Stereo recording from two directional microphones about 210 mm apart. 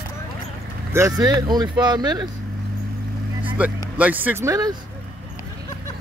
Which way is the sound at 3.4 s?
5° right (ahead or behind).